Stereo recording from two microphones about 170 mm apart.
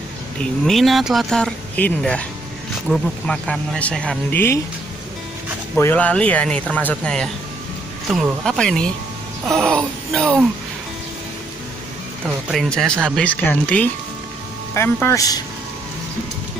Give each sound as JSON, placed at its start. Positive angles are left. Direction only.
{"t": 0.4, "sound": "speech", "side_deg": 0}
{"t": 5.8, "sound": "speech", "side_deg": 10}
{"t": 12.4, "sound": "speech", "side_deg": 0}